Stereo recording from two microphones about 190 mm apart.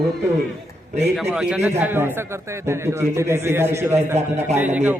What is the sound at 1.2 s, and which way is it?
A man's voice, 5° right (ahead or behind).